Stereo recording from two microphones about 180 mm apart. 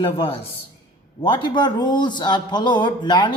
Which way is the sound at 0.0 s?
30° left (ahead or behind).